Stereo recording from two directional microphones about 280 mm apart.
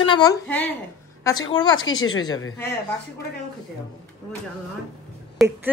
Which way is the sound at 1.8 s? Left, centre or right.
Left.